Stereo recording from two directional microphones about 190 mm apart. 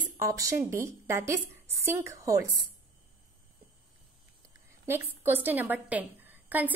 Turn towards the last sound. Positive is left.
turn(degrees=-10)  # may be behind; listen again after turning